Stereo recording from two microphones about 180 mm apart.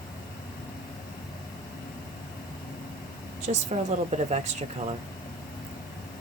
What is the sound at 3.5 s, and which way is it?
Speech, 40° right (ahead or behind).